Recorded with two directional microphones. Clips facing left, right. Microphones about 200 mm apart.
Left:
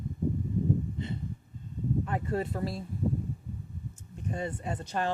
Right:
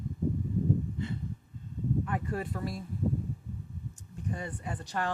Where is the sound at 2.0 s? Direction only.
25° left (ahead or behind).